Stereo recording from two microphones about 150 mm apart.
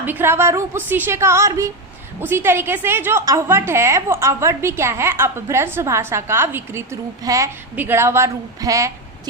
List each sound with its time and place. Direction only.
0.0 s a woman's voice: 15° right (ahead or behind)